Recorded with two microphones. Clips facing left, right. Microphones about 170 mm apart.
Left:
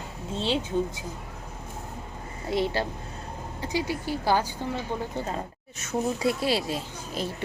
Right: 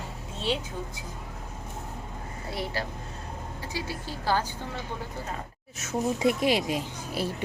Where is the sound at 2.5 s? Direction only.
25° left (ahead or behind).